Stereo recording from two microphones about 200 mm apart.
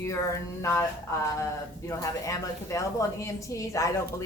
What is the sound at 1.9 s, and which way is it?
A woman's voice, 15° left (ahead or behind).